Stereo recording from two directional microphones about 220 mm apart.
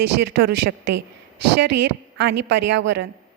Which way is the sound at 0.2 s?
50° right (ahead or behind).